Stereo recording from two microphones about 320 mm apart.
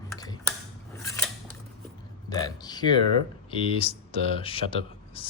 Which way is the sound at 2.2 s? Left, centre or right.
Centre.